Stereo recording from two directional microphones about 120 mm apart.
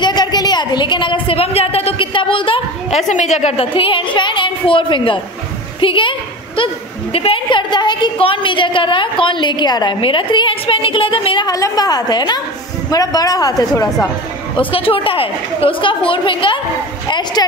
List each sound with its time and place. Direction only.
0.0 s a woman's voice: 35° left (ahead or behind)
3.0 s a woman's voice: 80° left
3.7 s a woman's voice: 45° left (ahead or behind)
11.4 s a woman's voice: 30° left (ahead or behind)
14.6 s a woman's voice: 50° left (ahead or behind)